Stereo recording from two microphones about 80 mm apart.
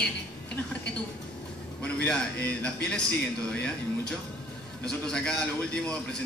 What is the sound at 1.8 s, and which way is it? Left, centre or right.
A man's voice, centre.